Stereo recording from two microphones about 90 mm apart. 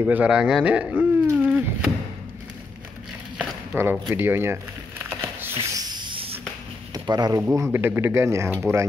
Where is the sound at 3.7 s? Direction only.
25° right (ahead or behind).